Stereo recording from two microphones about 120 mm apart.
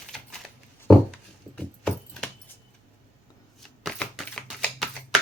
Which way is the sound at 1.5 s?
10° left (ahead or behind).